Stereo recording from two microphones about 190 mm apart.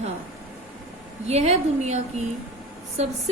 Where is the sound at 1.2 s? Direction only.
35° right (ahead or behind).